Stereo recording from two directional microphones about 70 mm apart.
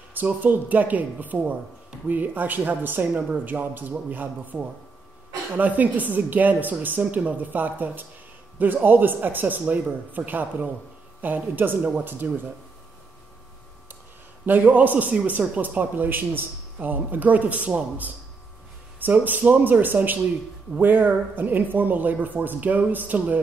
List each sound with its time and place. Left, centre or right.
0.2 s speech: right
14.4 s speech: right